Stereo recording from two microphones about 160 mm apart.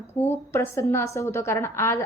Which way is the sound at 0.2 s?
15° left (ahead or behind).